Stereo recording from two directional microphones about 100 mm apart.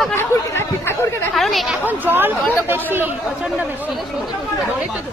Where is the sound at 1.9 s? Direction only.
20° right (ahead or behind).